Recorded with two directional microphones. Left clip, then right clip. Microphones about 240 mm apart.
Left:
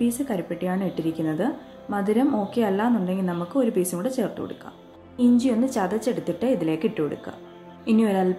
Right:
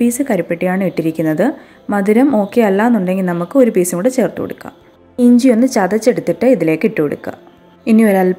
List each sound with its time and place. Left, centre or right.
0.0 s speech: right